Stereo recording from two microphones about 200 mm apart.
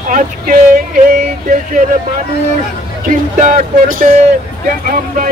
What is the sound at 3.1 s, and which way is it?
Music, 40° right (ahead or behind).